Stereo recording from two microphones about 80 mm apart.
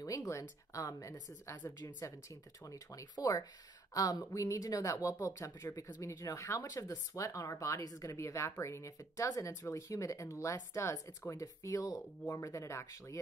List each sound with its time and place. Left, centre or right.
0.0 s speech: left